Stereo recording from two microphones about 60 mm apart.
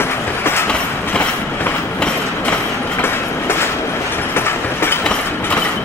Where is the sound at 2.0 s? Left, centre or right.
Centre.